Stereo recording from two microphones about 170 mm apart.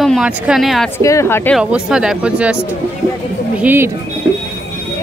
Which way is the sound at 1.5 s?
5° right (ahead or behind).